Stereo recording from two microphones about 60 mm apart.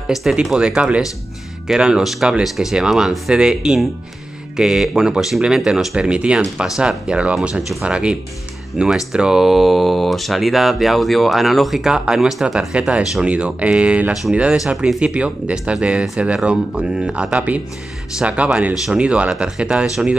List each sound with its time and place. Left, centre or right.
0.1 s speech: centre
0.6 s speech: centre
12.7 s speech: centre